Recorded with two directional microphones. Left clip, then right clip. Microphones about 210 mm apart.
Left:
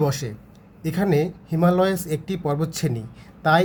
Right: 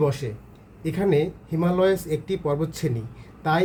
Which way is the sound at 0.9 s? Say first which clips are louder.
Even; 40° left (ahead or behind).